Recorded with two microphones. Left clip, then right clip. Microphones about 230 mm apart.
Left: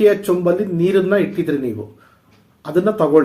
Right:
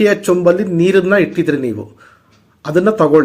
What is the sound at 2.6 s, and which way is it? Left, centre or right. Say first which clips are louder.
Speech: right 4 dB; right.